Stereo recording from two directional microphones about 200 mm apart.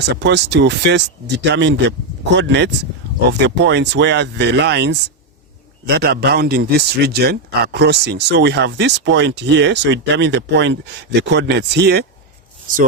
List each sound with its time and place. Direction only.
0.0 s a man's voice: 60° right (ahead or behind)